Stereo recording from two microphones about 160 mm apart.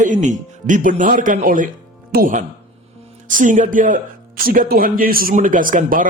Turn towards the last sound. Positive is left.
turn(degrees=-60)  # may be behind; listen again after turning